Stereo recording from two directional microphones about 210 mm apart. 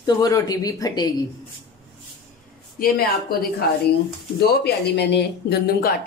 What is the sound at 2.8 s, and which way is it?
Speech, 45° left (ahead or behind).